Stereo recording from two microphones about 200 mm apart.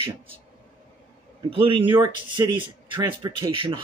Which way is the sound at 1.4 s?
25° right (ahead or behind).